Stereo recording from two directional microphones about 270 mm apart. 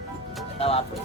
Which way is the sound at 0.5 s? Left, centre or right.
Left.